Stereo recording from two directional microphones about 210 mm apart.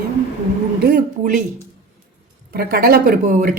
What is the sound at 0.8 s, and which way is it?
Speech, 45° right (ahead or behind).